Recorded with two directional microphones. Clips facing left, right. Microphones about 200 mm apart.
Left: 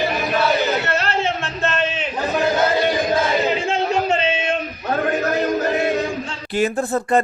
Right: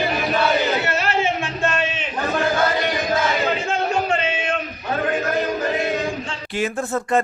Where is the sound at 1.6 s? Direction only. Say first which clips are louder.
Left 3 dB; 10° right (ahead or behind).